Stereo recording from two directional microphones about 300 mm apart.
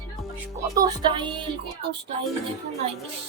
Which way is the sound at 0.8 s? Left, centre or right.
Centre.